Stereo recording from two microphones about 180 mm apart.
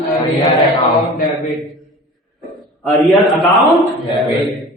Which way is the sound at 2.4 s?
Centre (ahead or behind).